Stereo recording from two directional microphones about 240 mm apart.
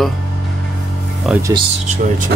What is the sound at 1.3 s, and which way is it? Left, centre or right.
Speech, centre.